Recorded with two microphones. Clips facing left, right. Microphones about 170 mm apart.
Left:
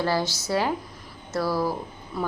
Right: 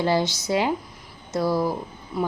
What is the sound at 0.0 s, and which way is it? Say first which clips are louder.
A woman's voice: right 3 dB; 20° right (ahead or behind).